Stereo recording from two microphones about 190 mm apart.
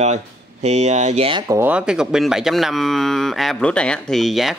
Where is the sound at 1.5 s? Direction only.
10° right (ahead or behind).